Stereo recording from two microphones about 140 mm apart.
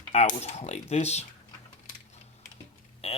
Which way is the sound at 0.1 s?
50° left (ahead or behind).